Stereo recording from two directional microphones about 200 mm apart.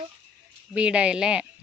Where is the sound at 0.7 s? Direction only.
5° right (ahead or behind).